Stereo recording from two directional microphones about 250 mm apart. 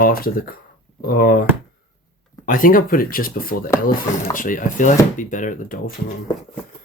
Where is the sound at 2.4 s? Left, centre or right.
Left.